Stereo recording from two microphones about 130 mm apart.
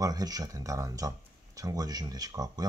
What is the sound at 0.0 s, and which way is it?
Speech, 30° right (ahead or behind).